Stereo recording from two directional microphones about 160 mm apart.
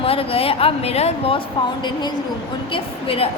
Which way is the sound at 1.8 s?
25° left (ahead or behind).